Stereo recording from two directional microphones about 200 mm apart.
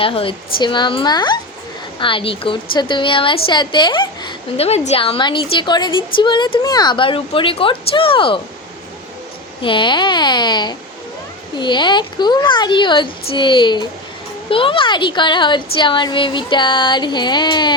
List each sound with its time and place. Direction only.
0.0 s a woman's voice: 25° left (ahead or behind)
9.6 s a woman's voice: 25° left (ahead or behind)